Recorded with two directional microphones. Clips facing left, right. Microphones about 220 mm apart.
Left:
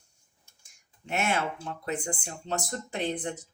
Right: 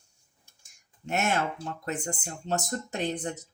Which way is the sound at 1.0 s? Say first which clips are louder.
Right 1 dB; 45° right (ahead or behind).